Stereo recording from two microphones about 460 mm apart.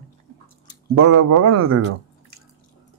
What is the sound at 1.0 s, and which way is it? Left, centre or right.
Speech, right.